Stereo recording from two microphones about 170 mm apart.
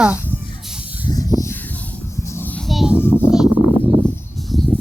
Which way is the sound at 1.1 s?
20° left (ahead or behind).